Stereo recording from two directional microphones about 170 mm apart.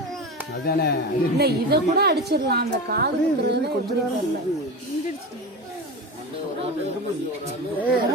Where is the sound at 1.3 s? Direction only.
70° right (ahead or behind).